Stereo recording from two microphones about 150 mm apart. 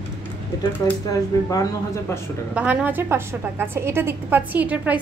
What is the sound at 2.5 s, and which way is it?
A woman's voice, 10° right (ahead or behind).